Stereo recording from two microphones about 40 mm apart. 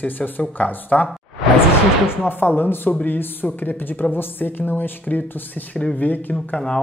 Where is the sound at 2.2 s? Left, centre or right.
Left.